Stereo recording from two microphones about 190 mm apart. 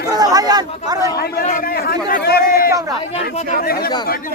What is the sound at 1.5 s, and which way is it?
Speech, 50° left (ahead or behind).